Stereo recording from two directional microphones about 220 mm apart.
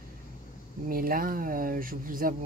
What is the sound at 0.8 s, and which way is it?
Speech, 40° right (ahead or behind).